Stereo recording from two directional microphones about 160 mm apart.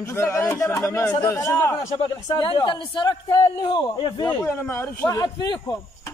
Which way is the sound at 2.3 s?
30° left (ahead or behind).